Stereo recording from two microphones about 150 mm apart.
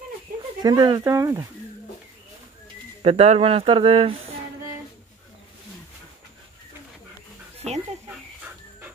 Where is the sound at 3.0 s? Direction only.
40° right (ahead or behind).